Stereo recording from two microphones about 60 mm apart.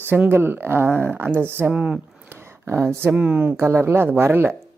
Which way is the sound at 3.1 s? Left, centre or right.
Right.